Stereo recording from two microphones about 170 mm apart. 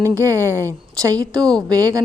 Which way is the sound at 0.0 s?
15° right (ahead or behind).